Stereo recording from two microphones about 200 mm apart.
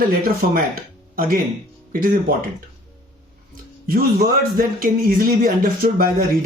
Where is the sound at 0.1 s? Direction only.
45° right (ahead or behind).